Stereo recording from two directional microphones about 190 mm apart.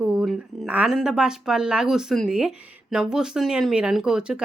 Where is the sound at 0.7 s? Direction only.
5° right (ahead or behind).